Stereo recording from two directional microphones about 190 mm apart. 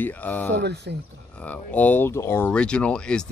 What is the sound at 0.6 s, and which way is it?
Speech, 60° right (ahead or behind).